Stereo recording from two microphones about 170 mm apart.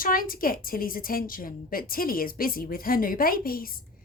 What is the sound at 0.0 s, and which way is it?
A woman's voice, 55° left (ahead or behind).